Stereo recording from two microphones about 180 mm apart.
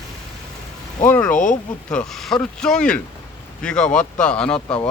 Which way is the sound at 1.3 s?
45° left (ahead or behind).